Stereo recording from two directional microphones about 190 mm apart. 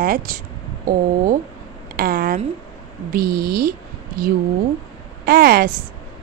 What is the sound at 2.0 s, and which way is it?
Speech, 50° right (ahead or behind).